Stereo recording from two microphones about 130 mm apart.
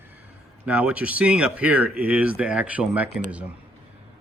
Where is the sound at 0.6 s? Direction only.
10° right (ahead or behind).